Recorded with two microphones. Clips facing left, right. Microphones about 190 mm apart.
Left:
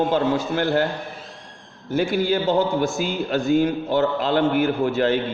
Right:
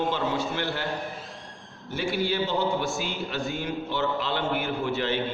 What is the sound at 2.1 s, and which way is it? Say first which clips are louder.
A man's voice: left 6 dB; 45° left (ahead or behind).